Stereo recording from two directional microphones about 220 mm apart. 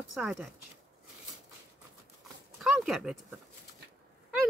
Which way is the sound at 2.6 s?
Centre (ahead or behind).